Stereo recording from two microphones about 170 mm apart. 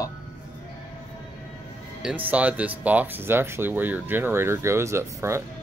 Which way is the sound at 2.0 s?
5° right (ahead or behind).